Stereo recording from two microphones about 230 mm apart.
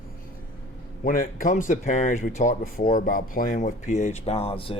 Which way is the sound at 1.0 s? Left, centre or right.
Left.